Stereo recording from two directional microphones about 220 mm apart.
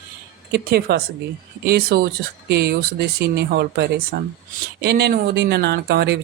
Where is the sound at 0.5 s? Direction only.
45° right (ahead or behind).